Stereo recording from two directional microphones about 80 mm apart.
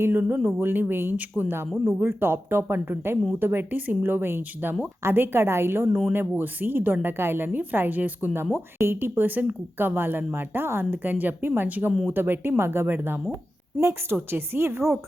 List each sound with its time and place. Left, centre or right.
0.0 s speech: right